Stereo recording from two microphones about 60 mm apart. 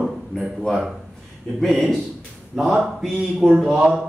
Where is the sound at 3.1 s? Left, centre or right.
Centre.